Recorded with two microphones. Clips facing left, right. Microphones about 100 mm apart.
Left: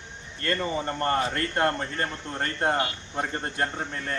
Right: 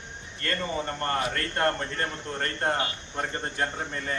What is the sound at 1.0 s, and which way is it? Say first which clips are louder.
Speech: left 4 dB; 25° left (ahead or behind).